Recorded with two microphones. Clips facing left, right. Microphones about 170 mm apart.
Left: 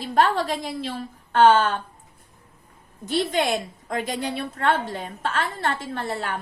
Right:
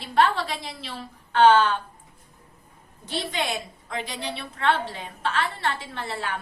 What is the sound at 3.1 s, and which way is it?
A woman's voice, 45° left (ahead or behind).